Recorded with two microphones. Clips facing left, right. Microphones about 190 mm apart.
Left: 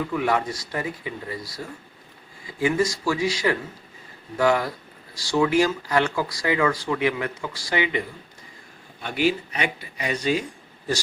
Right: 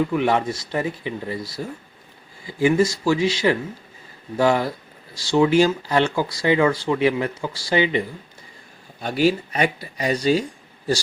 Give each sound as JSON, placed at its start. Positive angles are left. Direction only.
{"t": 0.1, "sound": "speech", "side_deg": -25}